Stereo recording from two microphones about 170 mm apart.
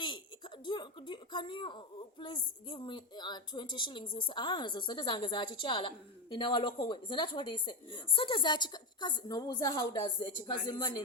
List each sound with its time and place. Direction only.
0.0 s speech: 30° left (ahead or behind)